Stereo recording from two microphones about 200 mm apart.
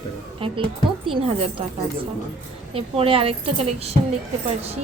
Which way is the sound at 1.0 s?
25° right (ahead or behind).